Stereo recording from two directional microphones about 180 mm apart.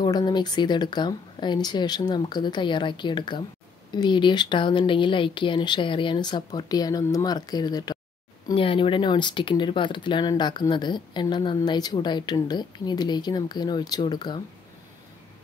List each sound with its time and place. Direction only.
0.0 s speech: 25° left (ahead or behind)